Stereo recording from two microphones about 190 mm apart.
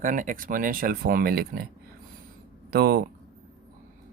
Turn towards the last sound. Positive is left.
turn(degrees=-55)  # may be behind; listen again after turning